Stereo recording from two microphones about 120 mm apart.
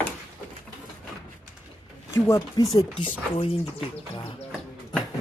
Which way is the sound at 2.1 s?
25° left (ahead or behind).